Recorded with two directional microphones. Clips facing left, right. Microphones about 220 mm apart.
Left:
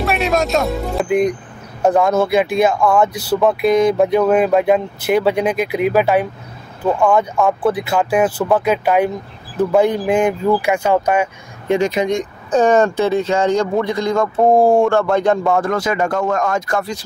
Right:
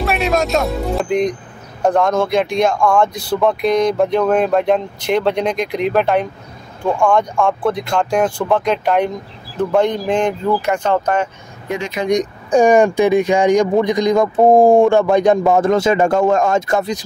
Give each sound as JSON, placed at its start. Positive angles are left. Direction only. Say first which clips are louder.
{"t": 0.0, "sound": "speech", "louder": "even", "side_deg": 0}
{"t": 11.7, "sound": "speech", "louder": "left 7 dB", "side_deg": 25}
{"t": 12.1, "sound": "speech", "louder": "right 3 dB", "side_deg": -15}